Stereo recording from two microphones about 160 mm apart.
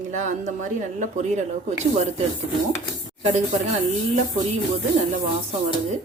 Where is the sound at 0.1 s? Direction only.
50° right (ahead or behind).